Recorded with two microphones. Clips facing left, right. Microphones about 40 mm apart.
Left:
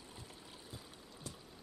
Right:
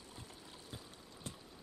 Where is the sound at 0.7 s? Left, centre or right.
Right.